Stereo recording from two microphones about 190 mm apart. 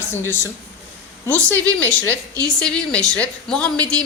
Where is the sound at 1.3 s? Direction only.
10° left (ahead or behind).